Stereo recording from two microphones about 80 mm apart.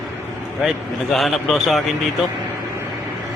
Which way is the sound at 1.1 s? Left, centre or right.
Centre.